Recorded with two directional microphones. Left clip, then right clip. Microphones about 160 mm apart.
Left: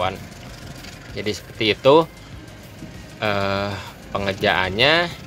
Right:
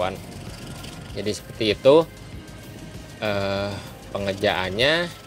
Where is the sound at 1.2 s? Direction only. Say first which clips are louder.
Left 2 dB; centre (ahead or behind).